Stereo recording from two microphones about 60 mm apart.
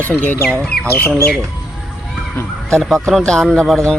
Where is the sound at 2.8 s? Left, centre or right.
Centre.